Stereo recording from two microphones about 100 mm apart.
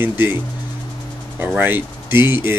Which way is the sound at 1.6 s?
20° right (ahead or behind).